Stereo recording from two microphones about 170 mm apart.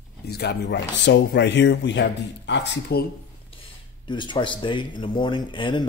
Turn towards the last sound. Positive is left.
turn(degrees=30)  # may be behind; listen again after turning